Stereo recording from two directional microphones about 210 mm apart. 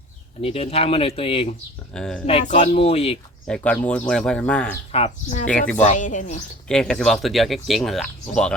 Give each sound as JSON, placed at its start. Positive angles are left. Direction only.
{"t": 0.4, "sound": "speech", "side_deg": 30}
{"t": 1.9, "sound": "speech", "side_deg": 5}
{"t": 2.2, "sound": "speech", "side_deg": 30}
{"t": 3.4, "sound": "speech", "side_deg": 5}
{"t": 4.9, "sound": "speech", "side_deg": 30}
{"t": 6.7, "sound": "speech", "side_deg": 5}